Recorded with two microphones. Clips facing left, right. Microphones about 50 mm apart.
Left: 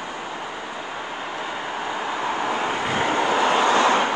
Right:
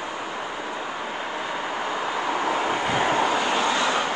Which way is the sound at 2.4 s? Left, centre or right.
Centre.